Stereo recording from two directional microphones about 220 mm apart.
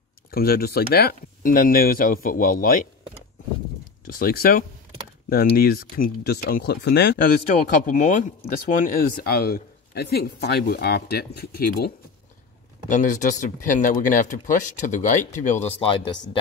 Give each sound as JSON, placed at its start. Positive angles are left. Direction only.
{"t": 0.3, "sound": "speech", "side_deg": 45}
{"t": 4.0, "sound": "speech", "side_deg": 40}
{"t": 7.8, "sound": "speech", "side_deg": 35}